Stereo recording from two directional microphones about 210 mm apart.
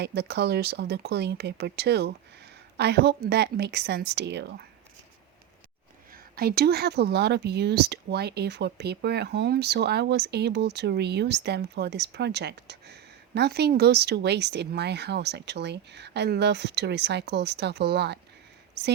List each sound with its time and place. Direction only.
0.0 s speech: 50° right (ahead or behind)
6.3 s speech: 45° right (ahead or behind)